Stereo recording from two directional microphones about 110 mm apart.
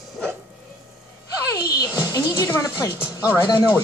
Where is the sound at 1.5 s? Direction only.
30° left (ahead or behind).